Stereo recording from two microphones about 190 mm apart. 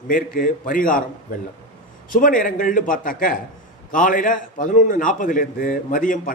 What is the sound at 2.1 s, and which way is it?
A man's voice, 45° left (ahead or behind).